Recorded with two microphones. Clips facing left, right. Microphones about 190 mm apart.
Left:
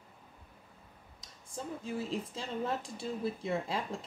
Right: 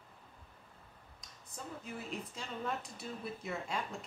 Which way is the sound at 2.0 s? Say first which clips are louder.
Left 6 dB; 30° left (ahead or behind).